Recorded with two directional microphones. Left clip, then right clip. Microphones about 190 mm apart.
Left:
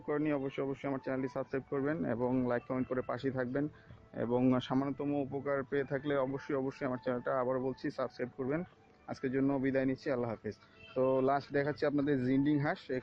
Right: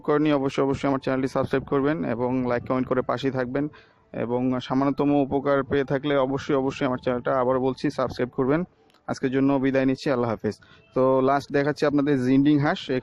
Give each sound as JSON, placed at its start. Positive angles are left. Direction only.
{"t": 0.1, "sound": "speech", "side_deg": -35}
{"t": 4.8, "sound": "speech", "side_deg": -35}